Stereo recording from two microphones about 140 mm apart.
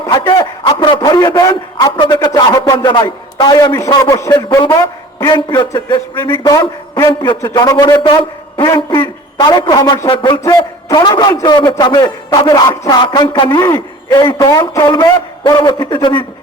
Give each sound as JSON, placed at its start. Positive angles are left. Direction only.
{"t": 0.0, "sound": "a man's voice", "side_deg": 35}
{"t": 6.3, "sound": "a man's voice", "side_deg": 20}